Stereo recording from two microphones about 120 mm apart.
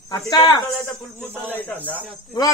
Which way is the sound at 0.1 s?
35° left (ahead or behind).